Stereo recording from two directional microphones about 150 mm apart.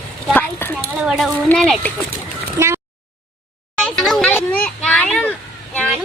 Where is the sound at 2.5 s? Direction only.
15° right (ahead or behind).